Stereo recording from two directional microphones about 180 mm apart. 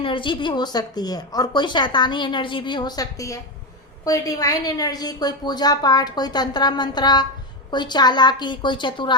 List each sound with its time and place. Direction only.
0.0 s speech: 30° left (ahead or behind)